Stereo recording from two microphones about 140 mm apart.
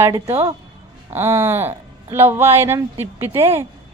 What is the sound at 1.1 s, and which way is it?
A woman's voice, 20° right (ahead or behind).